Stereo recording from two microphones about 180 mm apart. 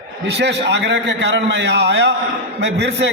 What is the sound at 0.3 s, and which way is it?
A man's voice, 70° right (ahead or behind).